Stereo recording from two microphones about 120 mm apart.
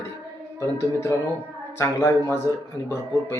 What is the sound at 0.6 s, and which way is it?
Speech, 25° left (ahead or behind).